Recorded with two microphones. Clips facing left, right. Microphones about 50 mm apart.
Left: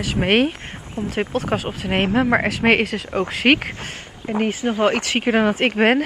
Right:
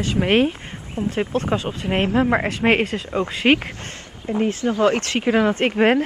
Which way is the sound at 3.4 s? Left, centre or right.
Centre.